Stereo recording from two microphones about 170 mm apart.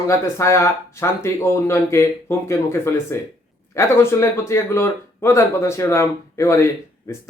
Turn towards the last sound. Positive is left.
turn(degrees=15)  # may be behind; listen again after turning